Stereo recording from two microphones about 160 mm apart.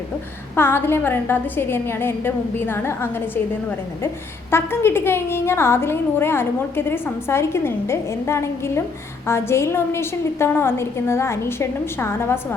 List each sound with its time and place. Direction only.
0.5 s a woman's voice: 15° left (ahead or behind)
4.5 s a woman's voice: 15° left (ahead or behind)